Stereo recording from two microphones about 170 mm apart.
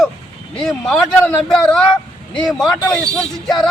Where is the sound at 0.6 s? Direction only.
Centre (ahead or behind).